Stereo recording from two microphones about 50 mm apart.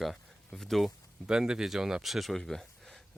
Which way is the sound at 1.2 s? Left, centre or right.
Centre.